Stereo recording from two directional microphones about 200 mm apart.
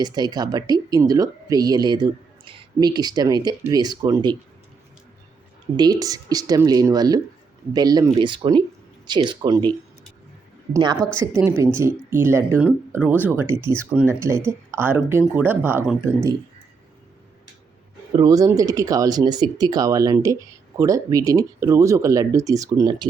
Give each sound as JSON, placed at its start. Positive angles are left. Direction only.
{"t": 0.0, "sound": "speech", "side_deg": -20}
{"t": 5.7, "sound": "speech", "side_deg": -20}
{"t": 18.2, "sound": "speech", "side_deg": -20}